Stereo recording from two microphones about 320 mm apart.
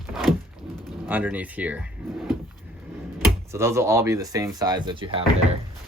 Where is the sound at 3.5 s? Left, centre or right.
Centre.